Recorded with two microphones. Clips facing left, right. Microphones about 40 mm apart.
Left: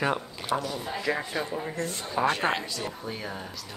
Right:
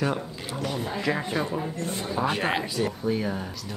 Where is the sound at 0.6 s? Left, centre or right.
Right.